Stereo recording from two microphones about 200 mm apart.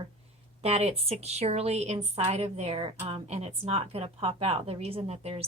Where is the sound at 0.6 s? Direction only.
30° right (ahead or behind).